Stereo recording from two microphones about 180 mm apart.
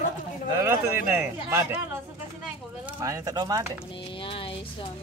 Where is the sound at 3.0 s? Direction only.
15° right (ahead or behind).